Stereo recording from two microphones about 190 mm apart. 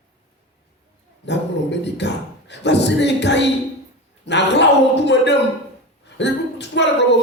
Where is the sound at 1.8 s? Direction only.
65° left (ahead or behind).